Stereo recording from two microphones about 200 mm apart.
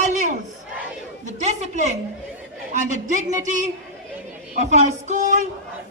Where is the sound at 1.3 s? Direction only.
35° right (ahead or behind).